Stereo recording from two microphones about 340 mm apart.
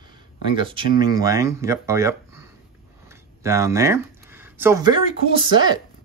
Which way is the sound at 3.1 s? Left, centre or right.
Centre.